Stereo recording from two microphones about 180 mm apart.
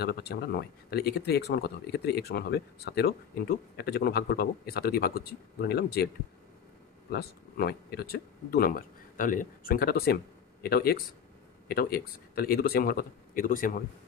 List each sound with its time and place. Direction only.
0.0 s speech: 65° left (ahead or behind)
7.1 s speech: 60° left (ahead or behind)